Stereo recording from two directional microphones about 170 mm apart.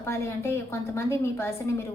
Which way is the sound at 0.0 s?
15° left (ahead or behind).